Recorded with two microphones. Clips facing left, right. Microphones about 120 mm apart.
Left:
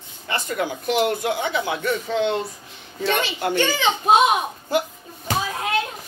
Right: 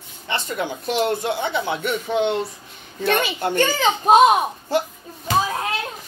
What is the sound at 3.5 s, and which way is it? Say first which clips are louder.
Speech: right 2 dB; 45° right (ahead or behind).